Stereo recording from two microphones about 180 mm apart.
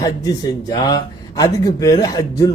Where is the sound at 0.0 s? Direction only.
20° left (ahead or behind).